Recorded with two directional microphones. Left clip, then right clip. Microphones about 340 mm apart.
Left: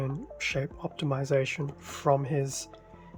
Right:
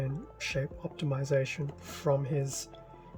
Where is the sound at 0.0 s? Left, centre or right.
Centre.